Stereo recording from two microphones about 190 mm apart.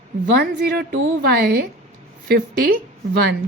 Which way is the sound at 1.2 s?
55° right (ahead or behind).